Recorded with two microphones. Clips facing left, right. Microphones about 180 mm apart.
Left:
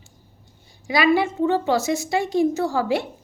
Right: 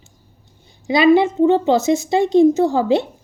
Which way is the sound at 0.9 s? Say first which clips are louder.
Right 6 dB; 20° right (ahead or behind).